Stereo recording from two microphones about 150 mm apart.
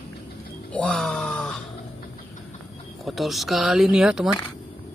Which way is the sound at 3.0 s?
Centre (ahead or behind).